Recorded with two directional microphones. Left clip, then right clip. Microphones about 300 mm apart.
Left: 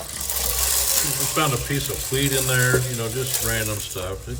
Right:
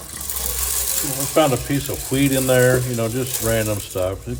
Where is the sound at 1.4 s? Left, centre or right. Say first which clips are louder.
Right 7 dB; centre.